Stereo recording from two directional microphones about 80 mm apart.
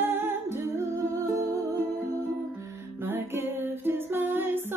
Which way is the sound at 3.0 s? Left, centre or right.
Right.